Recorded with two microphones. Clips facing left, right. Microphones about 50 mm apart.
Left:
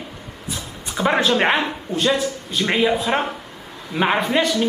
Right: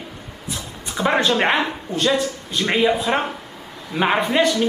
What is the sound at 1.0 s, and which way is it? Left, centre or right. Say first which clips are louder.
Speech: even; centre.